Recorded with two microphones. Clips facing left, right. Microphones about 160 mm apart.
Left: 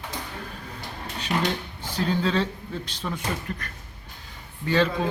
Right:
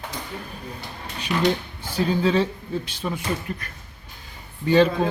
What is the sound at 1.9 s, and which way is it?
Speech, 10° right (ahead or behind).